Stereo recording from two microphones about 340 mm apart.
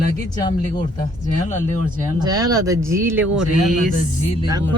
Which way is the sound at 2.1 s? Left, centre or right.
Centre.